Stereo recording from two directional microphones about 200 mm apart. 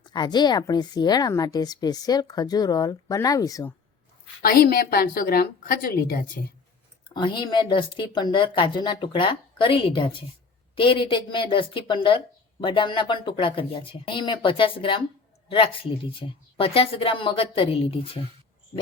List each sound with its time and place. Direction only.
0.1 s speech: 20° left (ahead or behind)
4.4 s speech: 50° left (ahead or behind)
7.1 s speech: 25° left (ahead or behind)